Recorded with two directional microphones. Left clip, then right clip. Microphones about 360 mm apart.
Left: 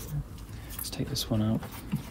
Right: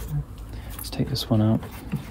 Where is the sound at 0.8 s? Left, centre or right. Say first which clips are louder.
Right 5 dB; right.